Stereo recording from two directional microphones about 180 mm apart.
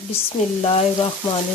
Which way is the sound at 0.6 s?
35° left (ahead or behind).